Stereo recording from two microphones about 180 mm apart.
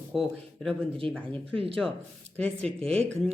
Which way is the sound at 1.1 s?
5° left (ahead or behind).